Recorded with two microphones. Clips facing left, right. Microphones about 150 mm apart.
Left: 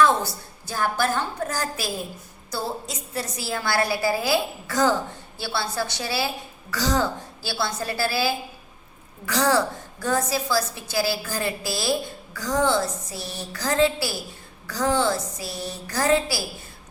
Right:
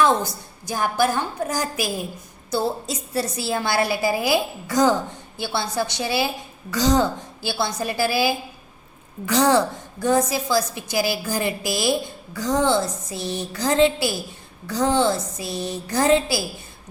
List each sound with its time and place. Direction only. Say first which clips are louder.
0.0 s a woman's voice: right 1 dB; 15° right (ahead or behind)
2.5 s a woman's voice: right 6 dB; 30° right (ahead or behind)